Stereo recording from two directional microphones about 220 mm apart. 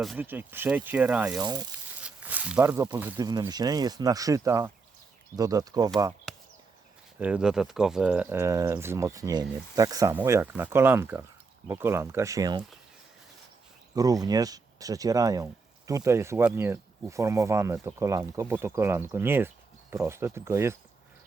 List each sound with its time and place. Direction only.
0.0 s speech: 5° right (ahead or behind)
1.4 s speech: 15° right (ahead or behind)
2.0 s speech: 5° right (ahead or behind)
6.3 s a sound: centre (ahead or behind)
7.2 s speech: 5° right (ahead or behind)
13.9 s speech: 15° right (ahead or behind)